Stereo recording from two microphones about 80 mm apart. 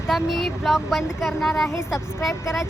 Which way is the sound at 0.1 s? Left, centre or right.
Centre.